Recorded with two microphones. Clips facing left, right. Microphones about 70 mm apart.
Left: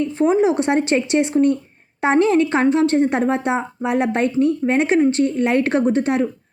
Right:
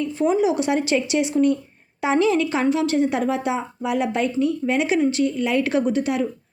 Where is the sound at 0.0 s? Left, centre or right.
Left.